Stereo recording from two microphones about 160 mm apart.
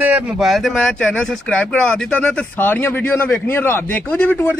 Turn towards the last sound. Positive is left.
turn(degrees=10)  # may be behind; listen again after turning